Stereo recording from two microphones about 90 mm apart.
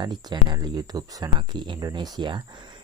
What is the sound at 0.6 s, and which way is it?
Speech, 45° right (ahead or behind).